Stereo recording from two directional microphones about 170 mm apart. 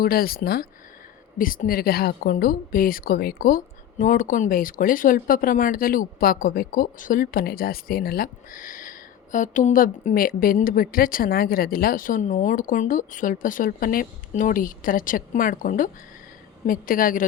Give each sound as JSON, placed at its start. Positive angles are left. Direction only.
{"t": 0.0, "sound": "a woman's voice", "side_deg": 60}